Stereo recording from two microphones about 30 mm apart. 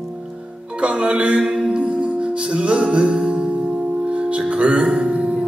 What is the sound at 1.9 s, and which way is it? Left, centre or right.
Music, right.